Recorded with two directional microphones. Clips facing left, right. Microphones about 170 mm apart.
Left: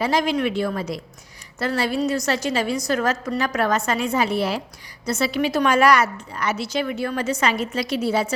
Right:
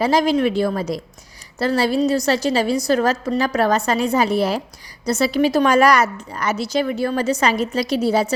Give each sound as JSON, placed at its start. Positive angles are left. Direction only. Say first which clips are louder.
{"t": 0.0, "sound": "a woman's voice", "louder": "right 4 dB", "side_deg": -35}